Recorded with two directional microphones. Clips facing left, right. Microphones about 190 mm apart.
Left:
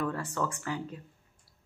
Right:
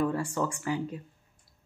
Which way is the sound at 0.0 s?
10° right (ahead or behind).